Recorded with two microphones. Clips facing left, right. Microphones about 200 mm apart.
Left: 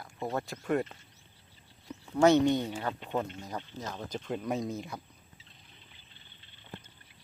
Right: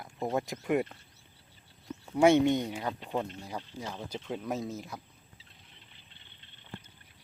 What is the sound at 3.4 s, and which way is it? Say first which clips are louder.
Speech: even; 10° right (ahead or behind).